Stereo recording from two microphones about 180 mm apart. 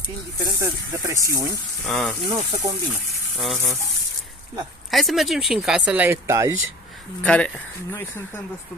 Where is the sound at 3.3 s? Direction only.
Centre (ahead or behind).